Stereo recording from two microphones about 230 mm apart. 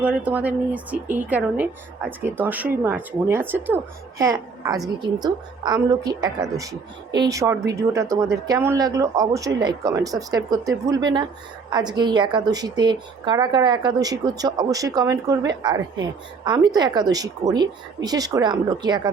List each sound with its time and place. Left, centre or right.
0.0 s a woman's voice: centre